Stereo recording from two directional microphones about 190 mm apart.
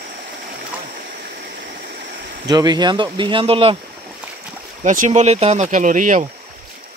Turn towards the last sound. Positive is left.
turn(degrees=-45)  # may be behind; listen again after turning